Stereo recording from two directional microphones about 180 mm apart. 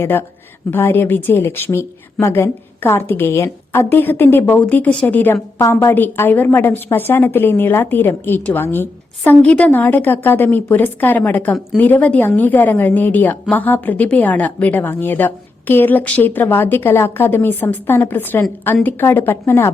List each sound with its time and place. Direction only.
0.0 s a woman's voice: 10° left (ahead or behind)